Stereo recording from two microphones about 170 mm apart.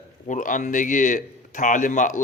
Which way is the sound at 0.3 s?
50° left (ahead or behind).